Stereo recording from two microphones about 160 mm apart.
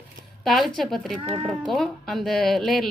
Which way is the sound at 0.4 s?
Centre (ahead or behind).